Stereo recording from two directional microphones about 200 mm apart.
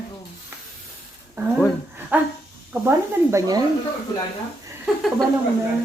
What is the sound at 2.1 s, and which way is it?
Speech, 10° right (ahead or behind).